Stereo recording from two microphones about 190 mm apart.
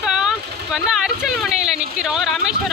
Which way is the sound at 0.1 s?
5° right (ahead or behind).